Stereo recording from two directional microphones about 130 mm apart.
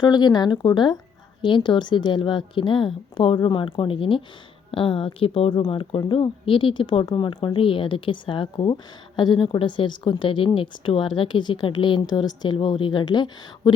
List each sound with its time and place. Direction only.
0.0 s a woman's voice: 35° left (ahead or behind)